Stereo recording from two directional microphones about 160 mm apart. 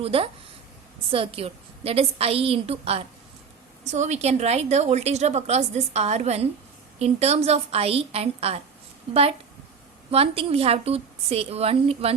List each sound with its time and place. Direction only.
0.0 s a woman's voice: 35° right (ahead or behind)
10.1 s a woman's voice: 40° right (ahead or behind)